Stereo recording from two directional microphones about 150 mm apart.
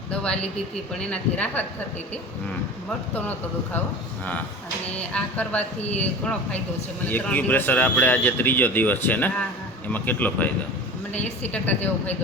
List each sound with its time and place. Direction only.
0.1 s a man's voice: 5° left (ahead or behind)
3.2 s a man's voice: 10° left (ahead or behind)
5.1 s a man's voice: 10° left (ahead or behind)
7.1 s a man's voice: 10° left (ahead or behind)